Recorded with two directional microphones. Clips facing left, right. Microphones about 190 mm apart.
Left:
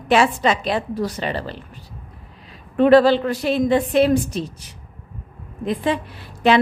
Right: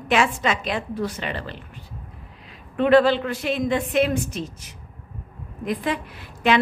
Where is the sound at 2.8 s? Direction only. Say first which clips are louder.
Left 4 dB; 35° left (ahead or behind).